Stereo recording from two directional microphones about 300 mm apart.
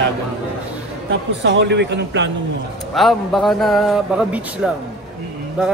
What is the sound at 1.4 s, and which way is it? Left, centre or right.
Speech, right.